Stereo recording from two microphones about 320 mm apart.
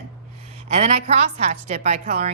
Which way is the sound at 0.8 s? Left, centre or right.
Right.